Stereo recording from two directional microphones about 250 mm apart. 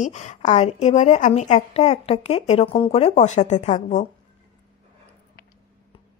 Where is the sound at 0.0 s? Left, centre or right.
Left.